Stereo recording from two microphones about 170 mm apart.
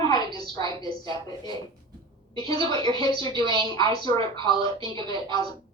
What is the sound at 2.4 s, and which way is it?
A woman's voice, 25° left (ahead or behind).